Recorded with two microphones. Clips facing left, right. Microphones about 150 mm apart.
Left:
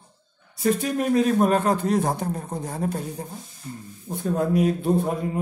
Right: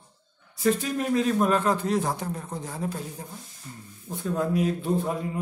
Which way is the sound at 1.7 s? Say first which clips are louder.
Left 3 dB; 55° left (ahead or behind).